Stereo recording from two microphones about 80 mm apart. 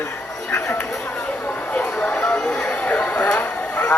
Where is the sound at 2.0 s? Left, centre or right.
Centre.